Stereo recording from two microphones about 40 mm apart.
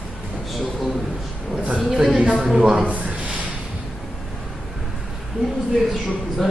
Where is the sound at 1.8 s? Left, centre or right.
Centre.